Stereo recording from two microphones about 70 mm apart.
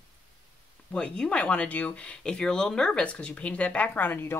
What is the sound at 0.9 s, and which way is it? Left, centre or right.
Speech, centre.